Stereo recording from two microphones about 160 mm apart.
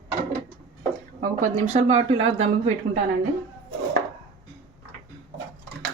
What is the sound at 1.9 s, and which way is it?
Speech, 40° right (ahead or behind).